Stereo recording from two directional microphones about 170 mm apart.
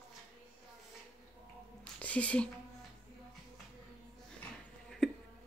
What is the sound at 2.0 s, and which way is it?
Speech, 10° left (ahead or behind).